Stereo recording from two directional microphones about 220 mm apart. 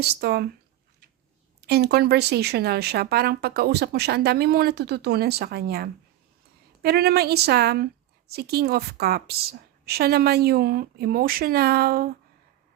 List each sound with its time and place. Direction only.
0.0 s speech: 45° right (ahead or behind)
1.6 s speech: 45° right (ahead or behind)